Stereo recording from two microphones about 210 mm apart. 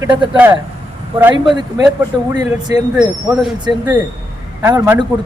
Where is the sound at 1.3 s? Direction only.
20° right (ahead or behind).